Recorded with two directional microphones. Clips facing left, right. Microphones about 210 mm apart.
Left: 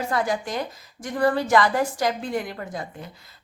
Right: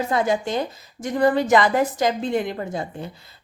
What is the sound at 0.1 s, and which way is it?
A woman's voice, 25° right (ahead or behind).